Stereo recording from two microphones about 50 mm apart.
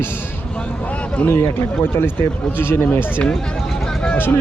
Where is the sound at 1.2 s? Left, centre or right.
Left.